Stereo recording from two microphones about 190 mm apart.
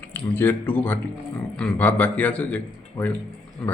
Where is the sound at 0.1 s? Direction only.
10° left (ahead or behind).